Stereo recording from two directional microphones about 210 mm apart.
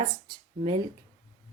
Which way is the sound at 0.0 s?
25° right (ahead or behind).